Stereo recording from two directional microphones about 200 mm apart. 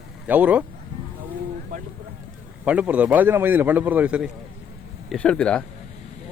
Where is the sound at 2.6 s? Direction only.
5° right (ahead or behind).